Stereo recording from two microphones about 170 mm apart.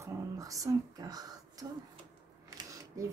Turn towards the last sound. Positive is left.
turn(degrees=-20)  # may be behind; listen again after turning